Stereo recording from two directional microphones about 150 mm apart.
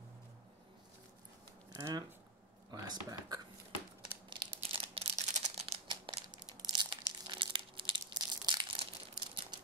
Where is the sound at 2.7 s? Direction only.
25° right (ahead or behind).